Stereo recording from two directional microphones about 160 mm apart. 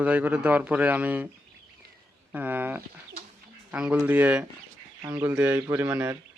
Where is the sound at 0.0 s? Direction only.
10° right (ahead or behind).